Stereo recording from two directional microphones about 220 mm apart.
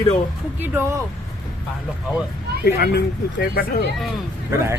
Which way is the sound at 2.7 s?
45° left (ahead or behind).